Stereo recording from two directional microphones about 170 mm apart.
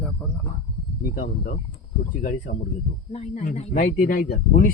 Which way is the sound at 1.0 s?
65° left (ahead or behind).